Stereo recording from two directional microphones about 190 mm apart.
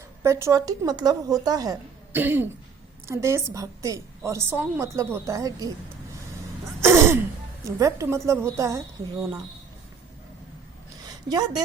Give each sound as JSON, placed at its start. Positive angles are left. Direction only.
{"t": 0.2, "sound": "a woman's voice", "side_deg": -15}
{"t": 6.7, "sound": "throat clearing", "side_deg": -15}
{"t": 7.6, "sound": "a woman's voice", "side_deg": -15}
{"t": 11.3, "sound": "a woman's voice", "side_deg": -20}